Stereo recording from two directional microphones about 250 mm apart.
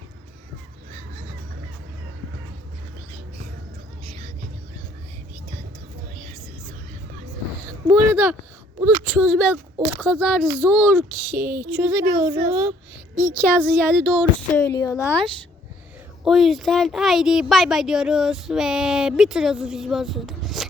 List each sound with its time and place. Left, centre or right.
4.0 s a sound: right
7.9 s a woman's voice: centre
14.8 s speech: centre